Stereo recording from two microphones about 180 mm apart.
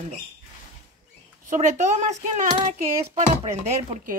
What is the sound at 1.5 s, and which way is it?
Speech, 40° right (ahead or behind).